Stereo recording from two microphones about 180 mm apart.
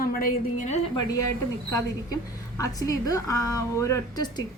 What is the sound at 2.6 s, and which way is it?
A woman's voice, 20° left (ahead or behind).